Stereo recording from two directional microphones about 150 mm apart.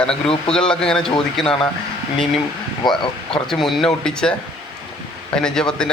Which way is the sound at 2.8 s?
30° left (ahead or behind).